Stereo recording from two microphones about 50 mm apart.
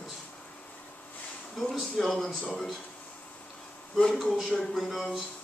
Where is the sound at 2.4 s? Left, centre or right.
Centre.